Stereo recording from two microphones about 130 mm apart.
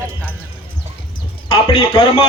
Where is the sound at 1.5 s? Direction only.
45° left (ahead or behind).